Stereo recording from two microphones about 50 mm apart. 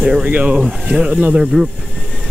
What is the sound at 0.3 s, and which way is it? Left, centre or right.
Speech, right.